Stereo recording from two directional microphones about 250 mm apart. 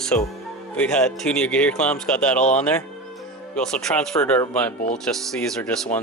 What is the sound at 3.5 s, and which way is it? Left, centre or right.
Speech, centre.